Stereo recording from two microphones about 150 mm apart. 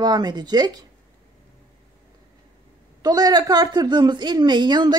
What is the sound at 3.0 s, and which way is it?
A woman's voice, 25° right (ahead or behind).